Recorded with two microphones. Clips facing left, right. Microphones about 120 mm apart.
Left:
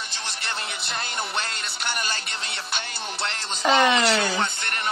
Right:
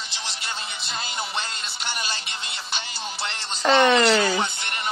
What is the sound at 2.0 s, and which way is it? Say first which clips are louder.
Music: left 1 dB; 50° left (ahead or behind).